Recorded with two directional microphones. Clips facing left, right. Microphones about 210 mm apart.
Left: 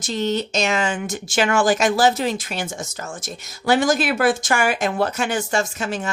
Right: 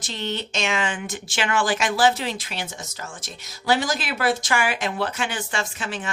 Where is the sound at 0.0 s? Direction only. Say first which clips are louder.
Left 7 dB; 45° left (ahead or behind).